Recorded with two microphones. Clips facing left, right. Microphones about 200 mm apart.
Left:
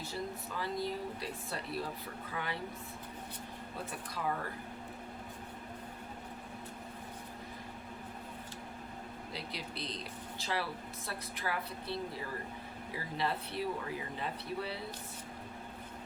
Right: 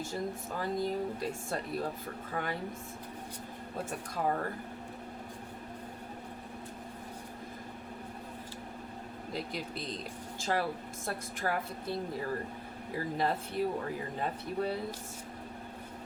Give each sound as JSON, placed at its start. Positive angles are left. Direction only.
{"t": 0.0, "sound": "speech", "side_deg": -45}
{"t": 3.8, "sound": "speech", "side_deg": -45}
{"t": 9.3, "sound": "speech", "side_deg": -45}